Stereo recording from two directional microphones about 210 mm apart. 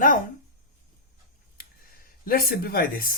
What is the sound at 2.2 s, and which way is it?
Speech, 45° left (ahead or behind).